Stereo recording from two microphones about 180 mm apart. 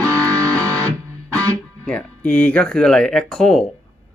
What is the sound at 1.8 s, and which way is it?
Speech, 5° left (ahead or behind).